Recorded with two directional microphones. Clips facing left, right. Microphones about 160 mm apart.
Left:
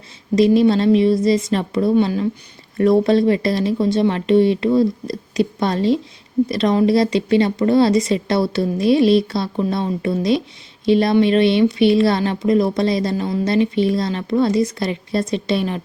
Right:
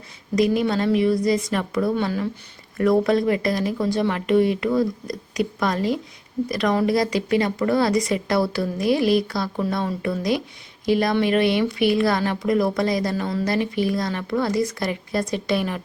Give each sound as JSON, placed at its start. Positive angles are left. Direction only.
{"t": 0.3, "sound": "speech", "side_deg": 25}